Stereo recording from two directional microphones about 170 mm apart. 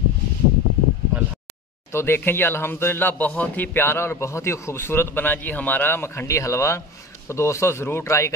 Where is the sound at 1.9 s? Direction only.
15° left (ahead or behind).